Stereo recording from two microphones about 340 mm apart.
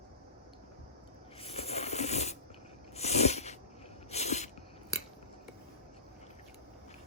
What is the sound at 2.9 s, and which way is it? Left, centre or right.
Sneeze, centre.